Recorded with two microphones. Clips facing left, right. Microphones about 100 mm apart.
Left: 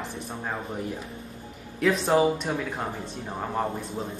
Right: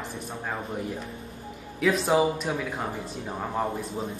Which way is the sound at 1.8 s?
Centre (ahead or behind).